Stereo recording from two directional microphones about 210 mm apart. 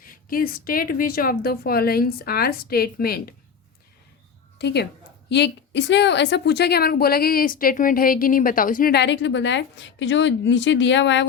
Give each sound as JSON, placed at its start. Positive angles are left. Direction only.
{"t": 0.0, "sound": "a woman's voice", "side_deg": 40}
{"t": 4.5, "sound": "a woman's voice", "side_deg": 55}